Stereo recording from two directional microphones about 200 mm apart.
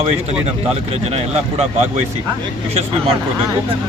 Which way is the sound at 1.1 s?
30° right (ahead or behind).